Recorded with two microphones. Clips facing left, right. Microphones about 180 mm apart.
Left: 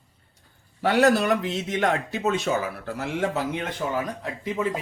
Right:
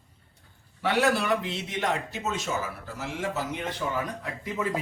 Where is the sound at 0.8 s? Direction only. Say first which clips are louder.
Left 5 dB; 40° left (ahead or behind); by 2.5 s 60° left (ahead or behind).